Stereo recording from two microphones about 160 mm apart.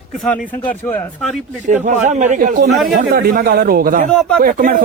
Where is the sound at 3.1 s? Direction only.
75° right (ahead or behind).